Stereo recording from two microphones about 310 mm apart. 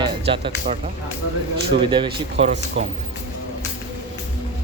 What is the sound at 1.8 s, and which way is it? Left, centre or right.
Speech, centre.